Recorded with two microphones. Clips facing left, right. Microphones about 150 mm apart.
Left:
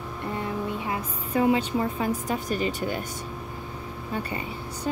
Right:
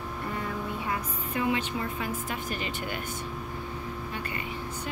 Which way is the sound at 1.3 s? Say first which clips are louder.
Left 7 dB; 35° left (ahead or behind).